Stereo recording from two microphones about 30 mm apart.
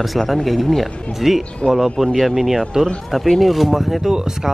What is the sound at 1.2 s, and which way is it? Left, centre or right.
Speech, centre.